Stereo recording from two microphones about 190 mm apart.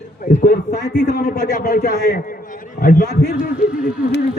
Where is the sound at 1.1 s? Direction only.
50° left (ahead or behind).